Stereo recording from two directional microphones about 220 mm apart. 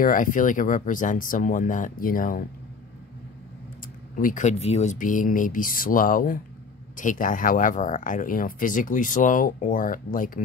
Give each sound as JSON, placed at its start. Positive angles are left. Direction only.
{"t": 0.0, "sound": "speech", "side_deg": 35}
{"t": 4.1, "sound": "speech", "side_deg": 35}